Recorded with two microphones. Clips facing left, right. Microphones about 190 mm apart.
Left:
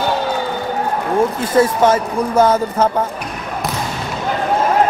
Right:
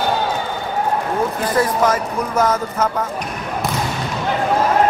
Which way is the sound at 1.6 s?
30° left (ahead or behind).